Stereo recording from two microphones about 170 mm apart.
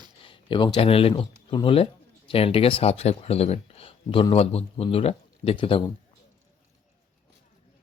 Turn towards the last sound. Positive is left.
turn(degrees=30)  # may be behind; listen again after turning